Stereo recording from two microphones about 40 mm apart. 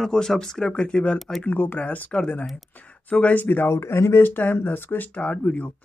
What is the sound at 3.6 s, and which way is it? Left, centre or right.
Speech, left.